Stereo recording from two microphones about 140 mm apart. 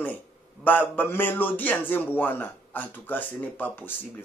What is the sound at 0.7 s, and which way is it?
A man's voice, 10° left (ahead or behind).